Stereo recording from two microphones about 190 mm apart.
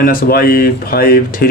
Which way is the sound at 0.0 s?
50° left (ahead or behind).